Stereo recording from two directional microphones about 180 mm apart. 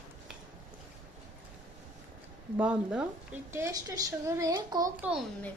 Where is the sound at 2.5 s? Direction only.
5° right (ahead or behind).